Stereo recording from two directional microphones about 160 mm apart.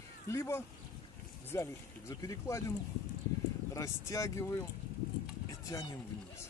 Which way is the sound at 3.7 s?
20° left (ahead or behind).